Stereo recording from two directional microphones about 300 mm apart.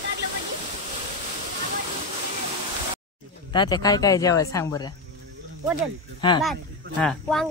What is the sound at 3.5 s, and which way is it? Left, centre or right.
Speech, centre.